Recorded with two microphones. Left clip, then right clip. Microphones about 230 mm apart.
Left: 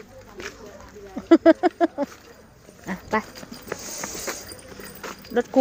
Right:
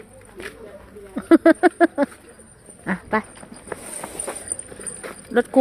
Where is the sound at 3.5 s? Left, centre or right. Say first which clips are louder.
Even; left.